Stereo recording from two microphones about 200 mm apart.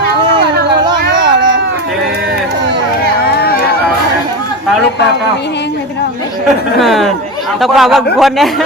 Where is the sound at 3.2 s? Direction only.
50° left (ahead or behind).